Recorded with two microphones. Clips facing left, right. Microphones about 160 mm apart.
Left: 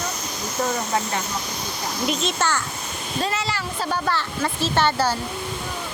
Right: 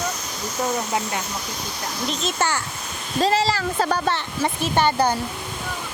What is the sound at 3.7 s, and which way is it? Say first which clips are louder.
Speech: right 3 dB; 50° right (ahead or behind).